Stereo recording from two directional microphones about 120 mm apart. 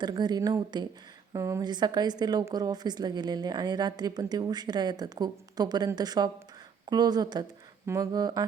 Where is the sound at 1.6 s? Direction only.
35° right (ahead or behind).